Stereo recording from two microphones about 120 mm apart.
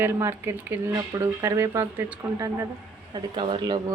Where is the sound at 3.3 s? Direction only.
40° right (ahead or behind).